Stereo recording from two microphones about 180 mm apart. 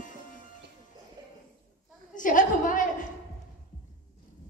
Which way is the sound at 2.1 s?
45° left (ahead or behind).